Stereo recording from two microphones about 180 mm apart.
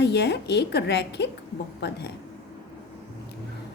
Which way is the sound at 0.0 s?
70° left (ahead or behind).